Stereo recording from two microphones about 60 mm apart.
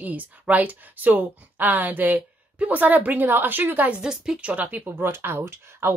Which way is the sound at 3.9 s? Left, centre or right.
Centre.